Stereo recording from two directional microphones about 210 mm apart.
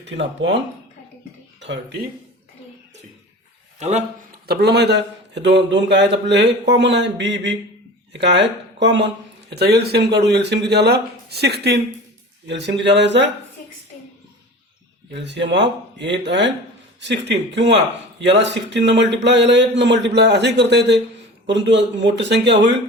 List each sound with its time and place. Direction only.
0.0 s a man's voice: 60° right (ahead or behind)
3.8 s a man's voice: 35° right (ahead or behind)
4.4 s a man's voice: 55° right (ahead or behind)
15.1 s a man's voice: 55° right (ahead or behind)